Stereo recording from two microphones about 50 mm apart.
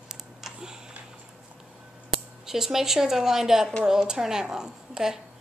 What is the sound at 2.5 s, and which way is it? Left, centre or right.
A woman's voice, centre.